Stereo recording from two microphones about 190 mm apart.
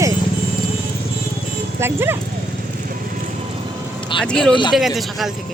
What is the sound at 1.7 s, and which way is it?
Speech, 10° right (ahead or behind).